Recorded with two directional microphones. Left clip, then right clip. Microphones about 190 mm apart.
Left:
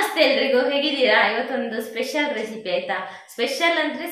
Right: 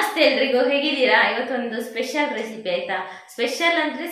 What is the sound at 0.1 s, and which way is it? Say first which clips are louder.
A woman's voice: even; centre (ahead or behind).